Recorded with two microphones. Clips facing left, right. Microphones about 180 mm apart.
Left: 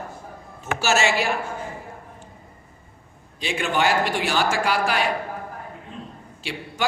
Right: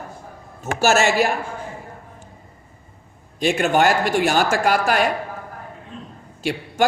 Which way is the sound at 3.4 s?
45° right (ahead or behind).